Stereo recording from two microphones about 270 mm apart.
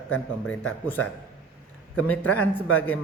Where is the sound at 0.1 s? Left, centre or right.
Centre.